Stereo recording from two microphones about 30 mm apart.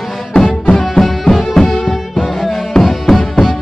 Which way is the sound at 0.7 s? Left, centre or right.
Centre.